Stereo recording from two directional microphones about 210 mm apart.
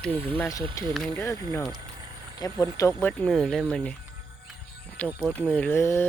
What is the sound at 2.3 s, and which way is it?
Speech, 15° left (ahead or behind).